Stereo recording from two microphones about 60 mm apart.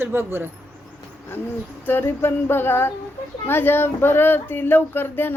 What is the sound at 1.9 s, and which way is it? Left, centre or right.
Speech, left.